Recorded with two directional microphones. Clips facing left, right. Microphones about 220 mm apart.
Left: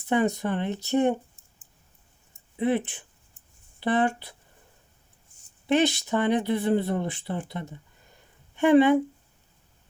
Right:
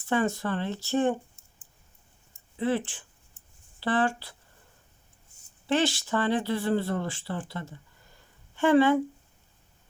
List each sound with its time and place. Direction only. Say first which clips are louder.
0.0 s speech: left 3 dB; 20° left (ahead or behind)
2.6 s speech: left 3 dB; 20° left (ahead or behind)
5.6 s speech: left 3 dB; 20° left (ahead or behind)